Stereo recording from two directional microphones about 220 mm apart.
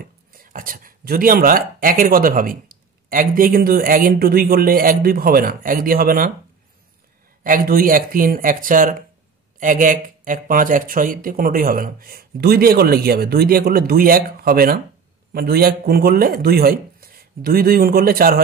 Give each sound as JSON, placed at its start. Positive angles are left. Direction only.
{"t": 0.3, "sound": "speech", "side_deg": -40}
{"t": 7.4, "sound": "speech", "side_deg": -40}